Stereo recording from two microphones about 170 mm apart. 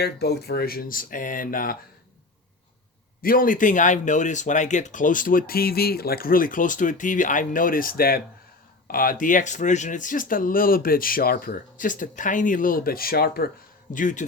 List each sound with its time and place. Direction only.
0.0 s speech: 75° left (ahead or behind); by 1.8 s 55° left (ahead or behind)
3.2 s speech: 55° left (ahead or behind)
13.9 s speech: 50° left (ahead or behind)